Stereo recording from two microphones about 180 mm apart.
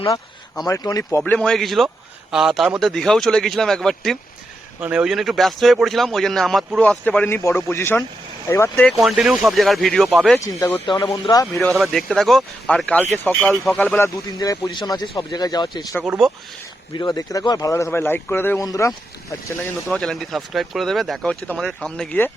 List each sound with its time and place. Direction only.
0.6 s speech: 20° left (ahead or behind)
1.2 s speech: 5° left (ahead or behind)
10.4 s speech: 15° left (ahead or behind)
10.8 s speech: 25° left (ahead or behind)
11.6 s speech: centre (ahead or behind); by 16.0 s 20° left (ahead or behind)
16.0 s speech: 5° right (ahead or behind)
16.9 s speech: 25° left (ahead or behind)
19.9 s speech: 5° left (ahead or behind)